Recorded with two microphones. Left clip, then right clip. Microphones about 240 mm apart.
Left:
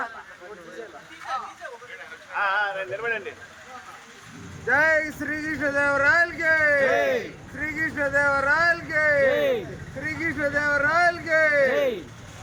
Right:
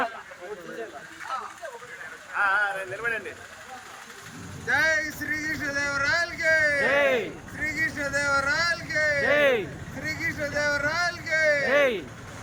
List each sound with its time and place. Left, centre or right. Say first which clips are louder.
2.3 s a sound: even; left
4.7 s speech: left 3 dB; left
6.9 s a sound: even; centre
7.6 s speech: left 2 dB; left
9.3 s speech: right 2 dB; centre
10.2 s speech: left 3 dB; left
11.7 s speech: right 2 dB; centre